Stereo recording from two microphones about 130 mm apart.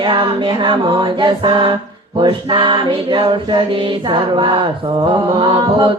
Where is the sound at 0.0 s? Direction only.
40° right (ahead or behind).